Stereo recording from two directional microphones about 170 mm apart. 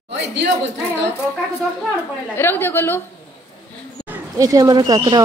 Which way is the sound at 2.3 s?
10° left (ahead or behind).